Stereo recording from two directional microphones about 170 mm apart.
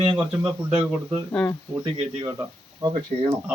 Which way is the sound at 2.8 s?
25° right (ahead or behind).